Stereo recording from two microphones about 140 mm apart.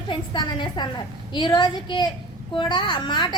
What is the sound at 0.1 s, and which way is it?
A woman's voice, 30° left (ahead or behind).